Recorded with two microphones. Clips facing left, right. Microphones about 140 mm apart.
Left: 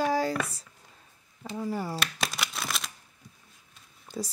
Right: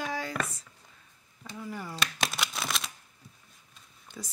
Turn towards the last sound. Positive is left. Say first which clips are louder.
# left 9 dB
turn(degrees=35)  # may be behind; listen again after turning